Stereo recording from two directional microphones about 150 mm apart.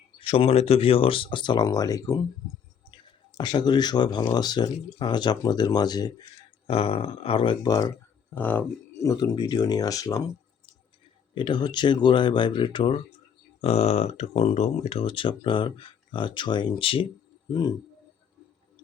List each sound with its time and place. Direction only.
0.2 s speech: 40° left (ahead or behind)
6.7 s speech: 40° left (ahead or behind)
8.4 s speech: 15° left (ahead or behind)
9.0 s speech: 30° left (ahead or behind)
11.3 s speech: 30° left (ahead or behind)